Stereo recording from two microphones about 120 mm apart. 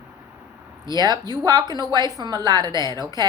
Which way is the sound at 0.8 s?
35° right (ahead or behind).